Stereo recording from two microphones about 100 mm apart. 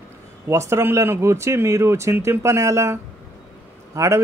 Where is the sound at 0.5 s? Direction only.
25° right (ahead or behind).